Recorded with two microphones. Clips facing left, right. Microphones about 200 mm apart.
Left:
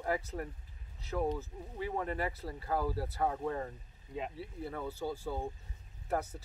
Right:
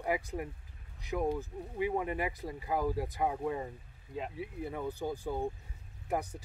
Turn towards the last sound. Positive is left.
turn(degrees=-15)  # may be behind; listen again after turning